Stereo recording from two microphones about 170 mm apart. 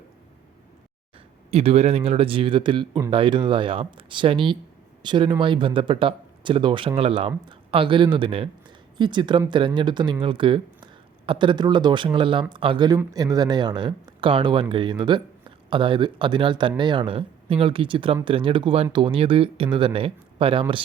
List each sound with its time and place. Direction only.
1.5 s speech: 35° right (ahead or behind)